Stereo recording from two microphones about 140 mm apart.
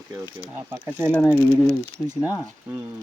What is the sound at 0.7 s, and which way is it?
Speech, 15° right (ahead or behind).